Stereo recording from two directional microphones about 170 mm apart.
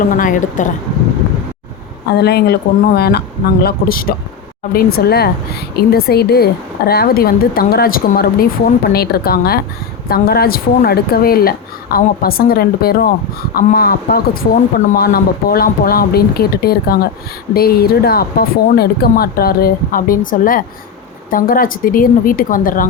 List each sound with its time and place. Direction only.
0.2 s a woman's voice: 50° left (ahead or behind)
2.1 s a woman's voice: 70° left (ahead or behind); by 22.9 s 55° left (ahead or behind)